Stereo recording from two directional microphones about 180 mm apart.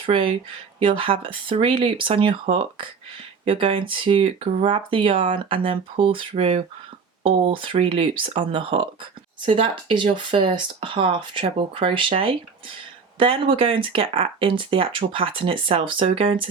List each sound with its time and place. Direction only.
0.0 s speech: 30° right (ahead or behind)